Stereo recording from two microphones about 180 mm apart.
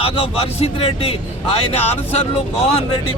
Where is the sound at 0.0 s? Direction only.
30° left (ahead or behind).